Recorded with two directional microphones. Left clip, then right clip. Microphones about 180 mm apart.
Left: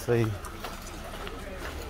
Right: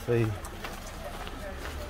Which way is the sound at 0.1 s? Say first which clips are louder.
Left 1 dB; 20° left (ahead or behind).